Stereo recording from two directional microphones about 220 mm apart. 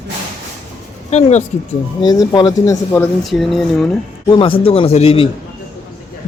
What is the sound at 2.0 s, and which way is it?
Speech, 15° left (ahead or behind).